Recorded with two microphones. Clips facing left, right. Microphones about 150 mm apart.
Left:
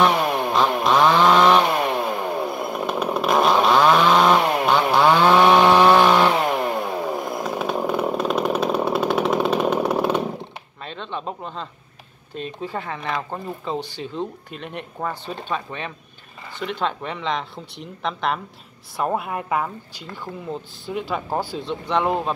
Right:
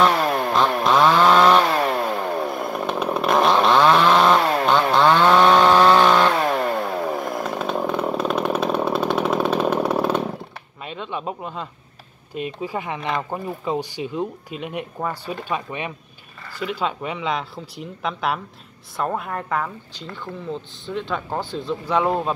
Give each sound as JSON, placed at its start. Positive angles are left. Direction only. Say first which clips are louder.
{"t": 0.0, "sound": "chainsaw", "louder": "even", "side_deg": 10}
{"t": 10.8, "sound": "a sound", "louder": "right 2 dB", "side_deg": -10}
{"t": 12.4, "sound": "speech", "louder": "right 2 dB", "side_deg": -10}
{"t": 19.0, "sound": "speech", "louder": "left 2 dB", "side_deg": 10}